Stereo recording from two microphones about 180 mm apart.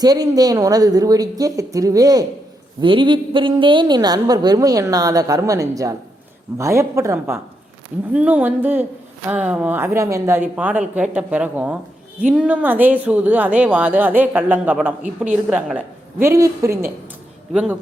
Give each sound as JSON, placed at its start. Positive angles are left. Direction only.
{"t": 0.0, "sound": "a woman's voice", "side_deg": -20}
{"t": 17.5, "sound": "speech", "side_deg": -5}